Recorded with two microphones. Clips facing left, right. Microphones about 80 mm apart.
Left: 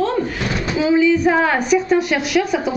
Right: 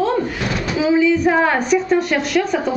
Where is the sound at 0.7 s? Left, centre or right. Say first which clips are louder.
Even; centre.